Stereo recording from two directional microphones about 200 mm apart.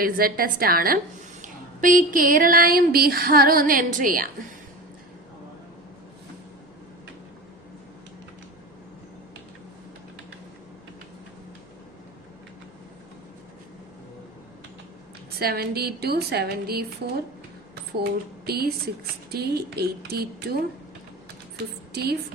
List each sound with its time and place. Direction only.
0.0 s speech: 45° right (ahead or behind)
15.4 s speech: 50° right (ahead or behind)
18.4 s speech: 50° right (ahead or behind)